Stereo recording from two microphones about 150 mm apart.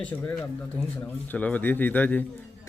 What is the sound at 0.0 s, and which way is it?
Speech, 10° left (ahead or behind).